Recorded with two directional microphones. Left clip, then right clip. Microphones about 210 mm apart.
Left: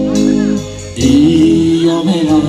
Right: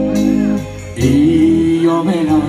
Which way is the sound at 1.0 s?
30° left (ahead or behind).